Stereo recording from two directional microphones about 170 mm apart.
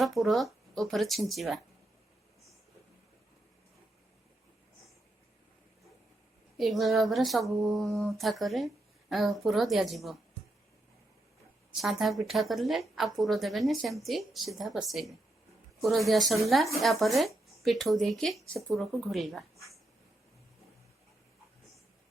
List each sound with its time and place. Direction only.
0.0 s speech: centre (ahead or behind)
6.6 s speech: centre (ahead or behind)
11.8 s speech: centre (ahead or behind)